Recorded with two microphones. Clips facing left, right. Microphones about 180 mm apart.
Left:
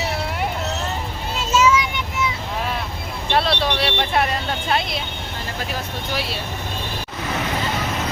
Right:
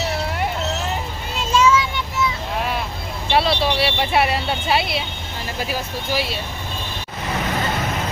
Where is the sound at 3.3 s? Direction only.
5° right (ahead or behind).